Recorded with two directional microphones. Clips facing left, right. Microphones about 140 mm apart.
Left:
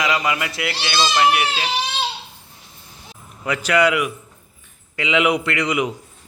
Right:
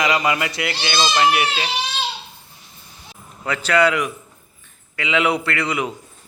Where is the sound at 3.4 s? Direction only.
15° left (ahead or behind).